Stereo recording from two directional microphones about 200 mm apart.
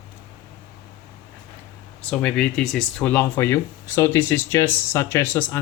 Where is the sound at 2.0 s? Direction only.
5° left (ahead or behind).